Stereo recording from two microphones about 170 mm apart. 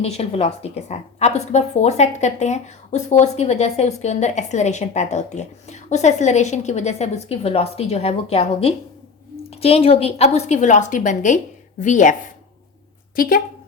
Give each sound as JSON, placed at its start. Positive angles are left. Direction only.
{"t": 0.0, "sound": "a woman's voice", "side_deg": 40}
{"t": 13.1, "sound": "a woman's voice", "side_deg": 55}